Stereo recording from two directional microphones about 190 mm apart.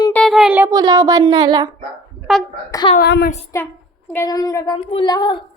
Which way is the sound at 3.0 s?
55° left (ahead or behind).